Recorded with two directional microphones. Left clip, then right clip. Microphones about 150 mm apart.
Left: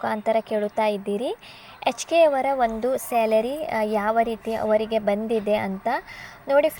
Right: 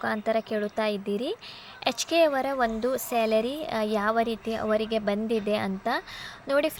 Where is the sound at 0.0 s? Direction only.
5° left (ahead or behind).